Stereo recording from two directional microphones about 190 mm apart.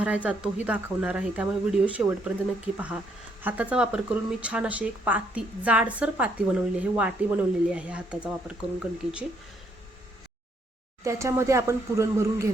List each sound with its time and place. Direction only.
0.0 s speech: 5° right (ahead or behind)
11.0 s speech: 15° right (ahead or behind)